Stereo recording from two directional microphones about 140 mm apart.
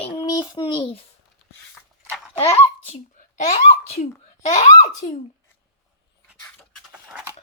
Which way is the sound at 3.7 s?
50° left (ahead or behind).